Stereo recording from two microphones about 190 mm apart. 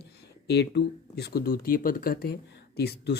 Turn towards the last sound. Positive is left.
turn(degrees=55)  # may be behind; listen again after turning